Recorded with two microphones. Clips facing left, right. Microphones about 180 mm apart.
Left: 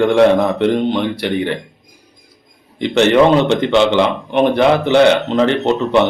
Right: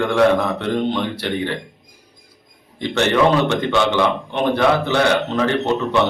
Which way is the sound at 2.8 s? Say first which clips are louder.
Left 6 dB; 20° left (ahead or behind).